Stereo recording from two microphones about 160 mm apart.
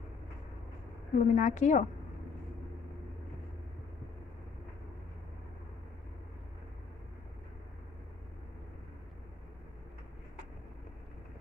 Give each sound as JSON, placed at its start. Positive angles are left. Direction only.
{"t": 1.1, "sound": "a woman's voice", "side_deg": 50}